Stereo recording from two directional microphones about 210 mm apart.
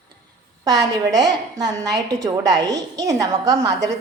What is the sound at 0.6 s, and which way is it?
A woman's voice, 20° right (ahead or behind).